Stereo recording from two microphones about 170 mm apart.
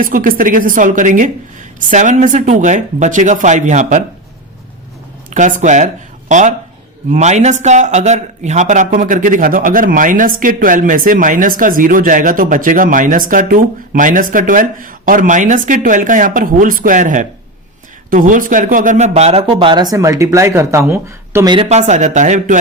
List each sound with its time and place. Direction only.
0.0 s speech: 55° right (ahead or behind)
5.3 s speech: 50° right (ahead or behind); by 21.5 s 15° right (ahead or behind)
21.5 s speech: 35° right (ahead or behind)